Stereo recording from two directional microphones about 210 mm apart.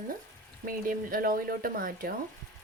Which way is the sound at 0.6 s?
45° right (ahead or behind).